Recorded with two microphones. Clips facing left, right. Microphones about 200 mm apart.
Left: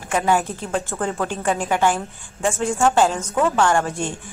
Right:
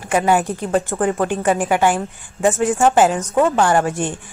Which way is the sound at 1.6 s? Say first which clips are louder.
Right 3 dB; 10° right (ahead or behind).